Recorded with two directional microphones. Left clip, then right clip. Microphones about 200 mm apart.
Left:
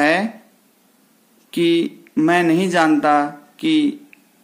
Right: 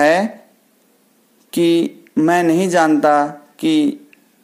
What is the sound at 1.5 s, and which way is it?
Speech, 30° right (ahead or behind).